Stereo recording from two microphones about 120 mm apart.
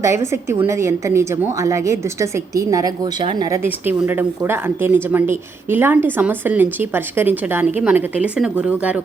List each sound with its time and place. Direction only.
0.0 s a woman's voice: 25° right (ahead or behind)
3.5 s a woman's voice: 20° right (ahead or behind)